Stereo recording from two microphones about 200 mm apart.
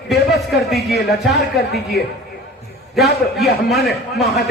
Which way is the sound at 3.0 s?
Centre (ahead or behind).